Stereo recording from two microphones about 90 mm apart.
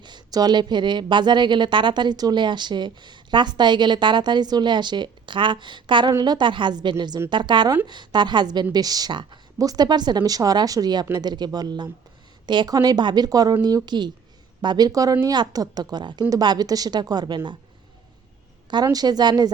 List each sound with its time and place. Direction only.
0.0 s a woman's voice: 50° right (ahead or behind)
18.7 s speech: 45° right (ahead or behind)